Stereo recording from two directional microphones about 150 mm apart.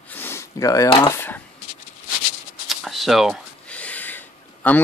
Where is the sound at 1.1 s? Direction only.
15° left (ahead or behind).